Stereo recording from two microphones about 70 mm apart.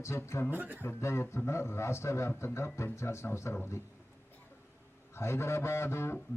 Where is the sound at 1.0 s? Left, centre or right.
Left.